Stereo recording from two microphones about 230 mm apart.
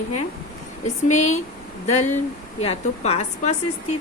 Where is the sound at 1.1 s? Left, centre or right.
Left.